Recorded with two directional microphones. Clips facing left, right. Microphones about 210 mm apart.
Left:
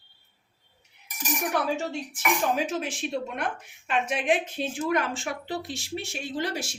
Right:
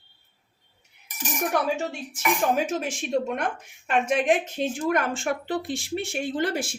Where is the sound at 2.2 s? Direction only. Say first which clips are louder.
Right 3 dB; 45° right (ahead or behind).